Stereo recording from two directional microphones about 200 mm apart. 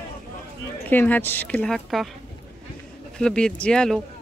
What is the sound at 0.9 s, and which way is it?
Speech, 10° left (ahead or behind).